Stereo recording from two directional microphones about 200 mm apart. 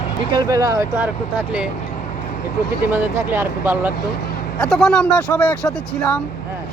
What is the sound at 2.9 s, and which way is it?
Speech, 10° right (ahead or behind).